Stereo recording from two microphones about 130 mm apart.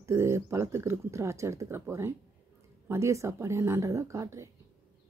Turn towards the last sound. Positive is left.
turn(degrees=-20)  # may be behind; listen again after turning